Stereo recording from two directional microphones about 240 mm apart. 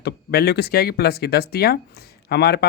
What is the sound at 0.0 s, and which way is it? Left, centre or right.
Speech, left.